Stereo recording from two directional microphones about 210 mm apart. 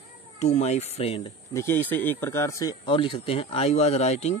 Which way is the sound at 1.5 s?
10° left (ahead or behind).